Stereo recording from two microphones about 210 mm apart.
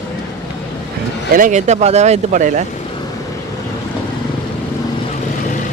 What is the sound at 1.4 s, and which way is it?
Speech, 35° right (ahead or behind).